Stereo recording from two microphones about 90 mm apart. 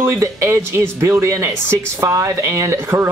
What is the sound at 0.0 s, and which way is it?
Speech, 35° right (ahead or behind).